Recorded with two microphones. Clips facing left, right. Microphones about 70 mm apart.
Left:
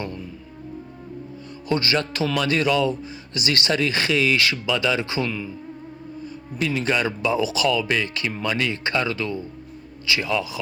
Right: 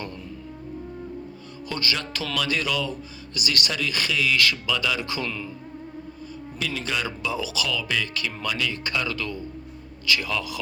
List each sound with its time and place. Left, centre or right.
1.7 s speech: left
5.2 s speech: centre
6.7 s speech: left